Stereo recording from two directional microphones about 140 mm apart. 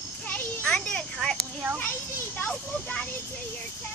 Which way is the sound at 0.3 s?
10° left (ahead or behind).